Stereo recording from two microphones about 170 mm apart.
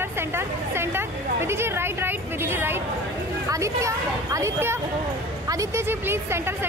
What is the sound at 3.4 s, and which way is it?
A woman's voice, 20° right (ahead or behind).